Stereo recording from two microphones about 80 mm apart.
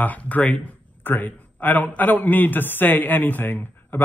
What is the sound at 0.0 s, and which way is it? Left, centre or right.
Speech, centre.